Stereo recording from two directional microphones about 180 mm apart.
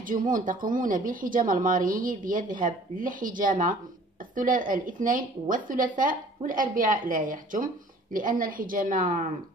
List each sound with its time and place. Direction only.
0.0 s a woman's voice: 50° right (ahead or behind)